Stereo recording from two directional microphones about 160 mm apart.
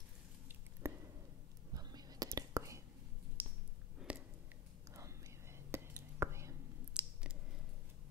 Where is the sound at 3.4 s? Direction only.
10° right (ahead or behind).